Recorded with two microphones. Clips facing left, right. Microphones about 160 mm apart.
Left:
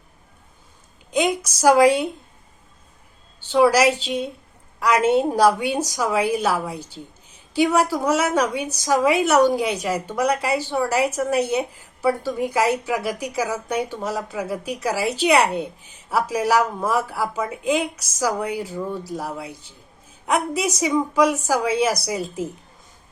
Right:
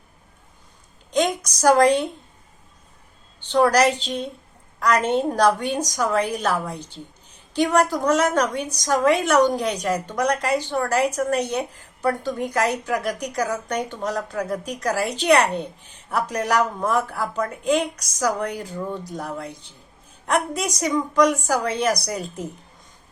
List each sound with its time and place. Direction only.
1.1 s a woman's voice: 5° left (ahead or behind)
3.4 s a woman's voice: 5° left (ahead or behind)